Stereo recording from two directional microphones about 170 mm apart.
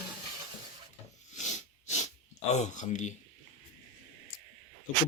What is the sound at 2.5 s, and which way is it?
Speech, 45° left (ahead or behind).